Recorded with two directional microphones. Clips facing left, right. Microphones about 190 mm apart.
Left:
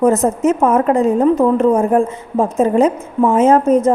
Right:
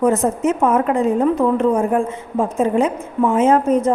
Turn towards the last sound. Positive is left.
turn(degrees=45)  # may be behind; listen again after turning